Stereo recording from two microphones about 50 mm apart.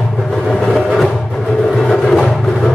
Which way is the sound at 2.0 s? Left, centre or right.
Centre.